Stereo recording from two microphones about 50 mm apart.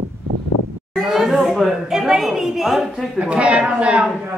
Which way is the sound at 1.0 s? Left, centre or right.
Centre.